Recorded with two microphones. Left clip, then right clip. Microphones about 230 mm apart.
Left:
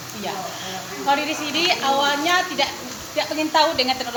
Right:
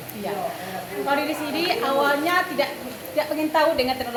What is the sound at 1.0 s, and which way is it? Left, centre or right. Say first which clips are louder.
A woman's voice: left 3 dB; right.